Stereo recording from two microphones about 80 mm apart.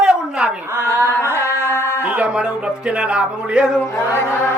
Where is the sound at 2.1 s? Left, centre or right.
Centre.